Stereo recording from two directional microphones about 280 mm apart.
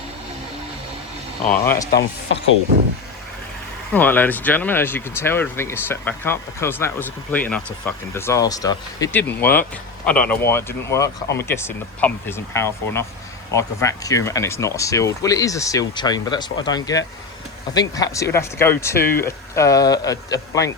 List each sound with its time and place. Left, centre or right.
1.6 s speech: centre
1.9 s speech: left
3.9 s speech: centre